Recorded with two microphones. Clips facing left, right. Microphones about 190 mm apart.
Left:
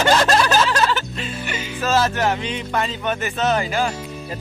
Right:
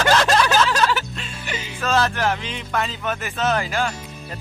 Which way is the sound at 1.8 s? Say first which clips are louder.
Left 2 dB; 5° left (ahead or behind).